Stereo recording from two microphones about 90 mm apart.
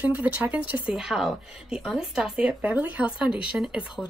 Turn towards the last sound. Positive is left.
turn(degrees=-10)  # may be behind; listen again after turning